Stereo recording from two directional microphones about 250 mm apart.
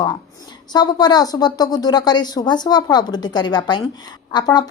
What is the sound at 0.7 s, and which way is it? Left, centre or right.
Speech, centre.